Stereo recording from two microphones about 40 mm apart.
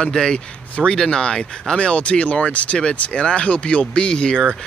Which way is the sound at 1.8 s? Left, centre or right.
Left.